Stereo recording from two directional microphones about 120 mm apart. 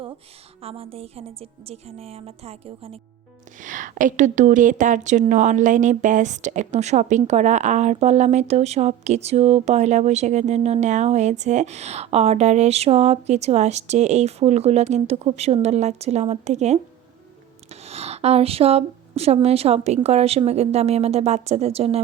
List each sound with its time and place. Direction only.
0.6 s a woman's voice: 55° right (ahead or behind)
3.6 s a woman's voice: 90° right; by 22.0 s 60° right (ahead or behind)